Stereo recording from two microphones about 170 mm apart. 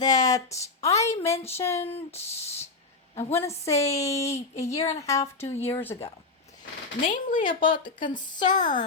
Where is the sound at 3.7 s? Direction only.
40° left (ahead or behind).